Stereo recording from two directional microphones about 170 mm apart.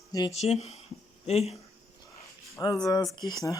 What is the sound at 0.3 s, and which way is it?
Speech, 40° left (ahead or behind).